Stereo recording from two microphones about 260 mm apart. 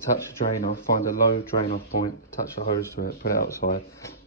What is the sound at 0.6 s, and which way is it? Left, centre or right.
Speech, left.